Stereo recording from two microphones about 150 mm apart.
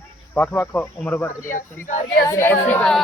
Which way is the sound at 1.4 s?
60° left (ahead or behind).